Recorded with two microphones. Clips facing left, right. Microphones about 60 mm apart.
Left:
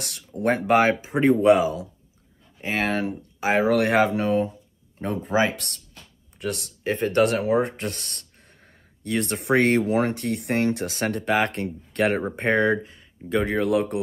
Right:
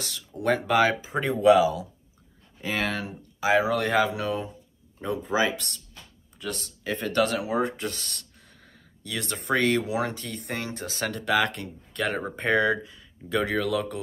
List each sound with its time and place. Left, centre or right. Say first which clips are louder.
0.0 s speech: left 3 dB; left
6.8 s speech: left 4 dB; left